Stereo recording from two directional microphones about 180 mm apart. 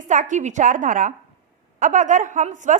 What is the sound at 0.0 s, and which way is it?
A woman's voice, 45° right (ahead or behind).